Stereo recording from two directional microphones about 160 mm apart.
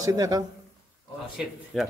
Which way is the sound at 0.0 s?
20° right (ahead or behind).